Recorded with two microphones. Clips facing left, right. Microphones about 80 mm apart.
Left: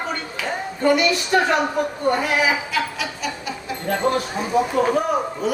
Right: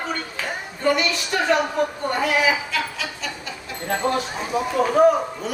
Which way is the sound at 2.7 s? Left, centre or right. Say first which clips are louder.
Left 2 dB; centre.